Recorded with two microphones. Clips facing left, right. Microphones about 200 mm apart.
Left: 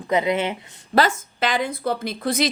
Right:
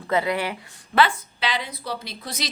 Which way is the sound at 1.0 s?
45° left (ahead or behind).